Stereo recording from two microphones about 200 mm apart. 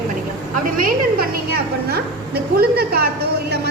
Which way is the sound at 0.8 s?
50° right (ahead or behind).